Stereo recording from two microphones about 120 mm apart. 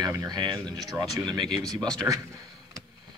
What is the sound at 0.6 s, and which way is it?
Speech, centre (ahead or behind).